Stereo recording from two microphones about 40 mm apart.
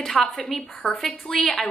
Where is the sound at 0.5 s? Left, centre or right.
Centre.